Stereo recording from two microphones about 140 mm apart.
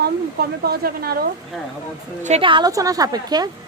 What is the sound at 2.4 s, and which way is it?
Speech, 35° right (ahead or behind).